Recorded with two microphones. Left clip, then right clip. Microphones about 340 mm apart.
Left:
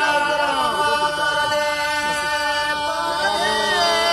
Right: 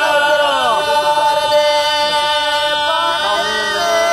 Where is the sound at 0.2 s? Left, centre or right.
Right.